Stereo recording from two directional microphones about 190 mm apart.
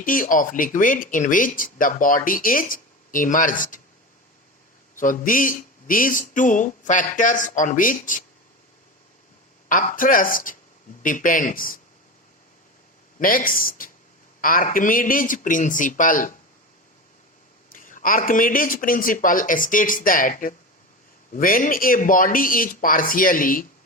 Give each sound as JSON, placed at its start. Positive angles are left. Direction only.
{"t": 0.0, "sound": "speech", "side_deg": 45}
{"t": 4.9, "sound": "speech", "side_deg": 45}
{"t": 9.6, "sound": "speech", "side_deg": 45}
{"t": 13.1, "sound": "speech", "side_deg": 50}
{"t": 17.7, "sound": "speech", "side_deg": 45}